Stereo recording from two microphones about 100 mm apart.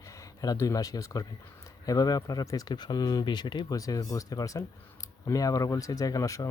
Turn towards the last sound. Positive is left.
turn(degrees=30)  # may be behind; listen again after turning